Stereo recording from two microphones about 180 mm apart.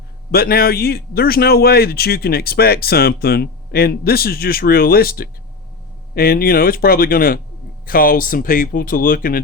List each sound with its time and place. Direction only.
0.3 s a man's voice: 55° left (ahead or behind)